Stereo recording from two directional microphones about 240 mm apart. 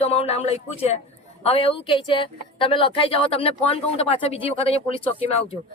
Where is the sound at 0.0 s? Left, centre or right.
Left.